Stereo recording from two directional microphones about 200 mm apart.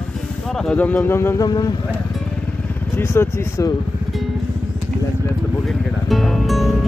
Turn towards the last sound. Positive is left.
turn(degrees=0)  # may be behind; listen again after turning